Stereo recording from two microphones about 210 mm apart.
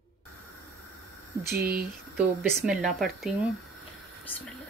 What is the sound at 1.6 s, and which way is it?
Speech, 45° right (ahead or behind).